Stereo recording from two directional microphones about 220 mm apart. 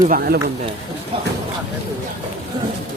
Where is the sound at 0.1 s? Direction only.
45° right (ahead or behind).